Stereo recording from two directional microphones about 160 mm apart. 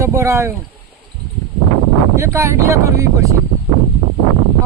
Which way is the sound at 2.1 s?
20° right (ahead or behind).